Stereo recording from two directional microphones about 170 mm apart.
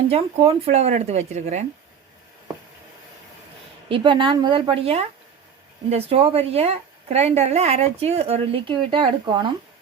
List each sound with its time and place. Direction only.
0.1 s a woman's voice: 35° right (ahead or behind)
3.8 s a woman's voice: 30° right (ahead or behind)